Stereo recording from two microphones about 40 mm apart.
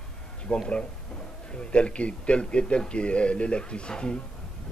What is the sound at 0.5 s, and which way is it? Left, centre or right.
Speech, left.